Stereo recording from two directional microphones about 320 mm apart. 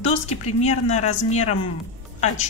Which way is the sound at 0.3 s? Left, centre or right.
Left.